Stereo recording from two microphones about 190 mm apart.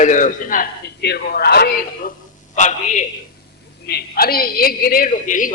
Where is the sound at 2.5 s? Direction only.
40° left (ahead or behind).